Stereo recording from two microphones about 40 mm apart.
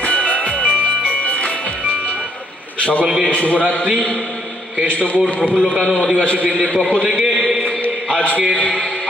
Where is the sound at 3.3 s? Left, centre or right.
Left.